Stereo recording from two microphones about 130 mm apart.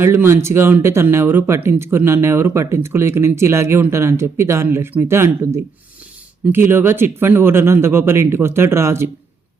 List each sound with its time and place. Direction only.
0.0 s speech: 20° right (ahead or behind)